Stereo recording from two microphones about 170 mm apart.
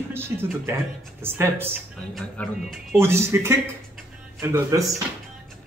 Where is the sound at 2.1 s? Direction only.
Centre (ahead or behind).